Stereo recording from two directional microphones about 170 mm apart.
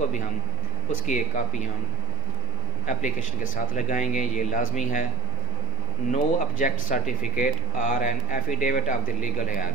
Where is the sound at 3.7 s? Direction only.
45° left (ahead or behind).